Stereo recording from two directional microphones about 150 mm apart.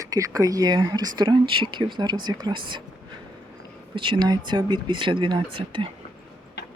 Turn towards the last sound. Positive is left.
turn(degrees=-35)  # may be behind; listen again after turning